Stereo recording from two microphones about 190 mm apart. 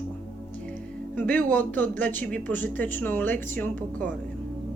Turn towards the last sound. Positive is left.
turn(degrees=10)  # may be behind; listen again after turning